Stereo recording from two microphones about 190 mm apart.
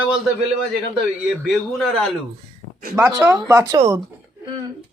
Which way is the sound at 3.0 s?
10° right (ahead or behind).